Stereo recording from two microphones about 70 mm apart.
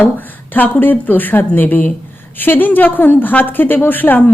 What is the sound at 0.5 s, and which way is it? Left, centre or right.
A woman's voice, left.